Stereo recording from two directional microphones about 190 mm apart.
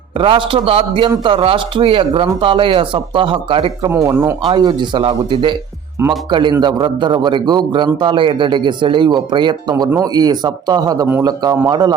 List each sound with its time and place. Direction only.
0.2 s a man's voice: 25° right (ahead or behind)
3.8 s a man's voice: 15° right (ahead or behind)